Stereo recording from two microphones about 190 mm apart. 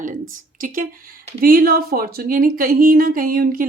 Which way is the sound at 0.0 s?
45° right (ahead or behind).